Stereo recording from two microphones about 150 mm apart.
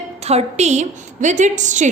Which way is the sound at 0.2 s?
45° right (ahead or behind).